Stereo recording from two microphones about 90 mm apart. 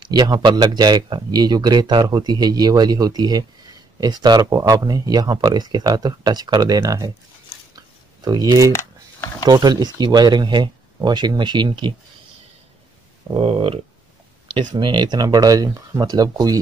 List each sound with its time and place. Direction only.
0.0 s speech: 50° right (ahead or behind)
7.7 s a sound: 45° right (ahead or behind)
9.5 s speech: 50° right (ahead or behind)
13.3 s speech: 85° right
14.5 s speech: 60° right (ahead or behind); by 16.5 s 40° right (ahead or behind)